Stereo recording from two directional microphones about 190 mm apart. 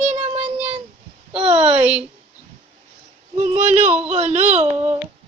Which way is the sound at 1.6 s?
5° right (ahead or behind).